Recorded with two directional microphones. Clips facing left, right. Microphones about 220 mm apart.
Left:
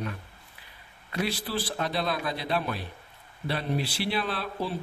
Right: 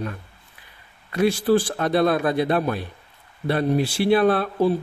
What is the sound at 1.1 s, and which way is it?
A man's voice, 50° right (ahead or behind).